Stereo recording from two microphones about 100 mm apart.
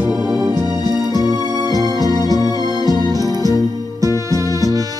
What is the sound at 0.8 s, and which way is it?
Music, 45° left (ahead or behind).